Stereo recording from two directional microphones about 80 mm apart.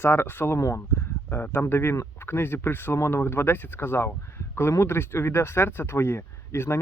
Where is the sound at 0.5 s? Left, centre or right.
Left.